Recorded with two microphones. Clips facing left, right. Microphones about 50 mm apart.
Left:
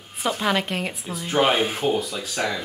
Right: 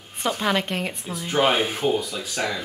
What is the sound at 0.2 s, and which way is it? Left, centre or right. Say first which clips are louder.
Speech: even; centre.